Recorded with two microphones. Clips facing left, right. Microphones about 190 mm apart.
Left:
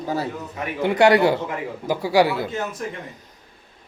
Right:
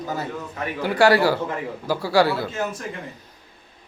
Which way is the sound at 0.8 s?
20° left (ahead or behind).